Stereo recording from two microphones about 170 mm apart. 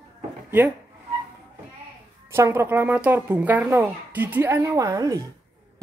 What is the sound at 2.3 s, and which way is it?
A woman's voice, 15° right (ahead or behind).